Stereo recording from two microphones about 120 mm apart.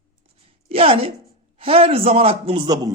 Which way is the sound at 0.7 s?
50° right (ahead or behind).